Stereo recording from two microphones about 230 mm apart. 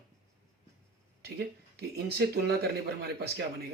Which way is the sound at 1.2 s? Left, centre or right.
Right.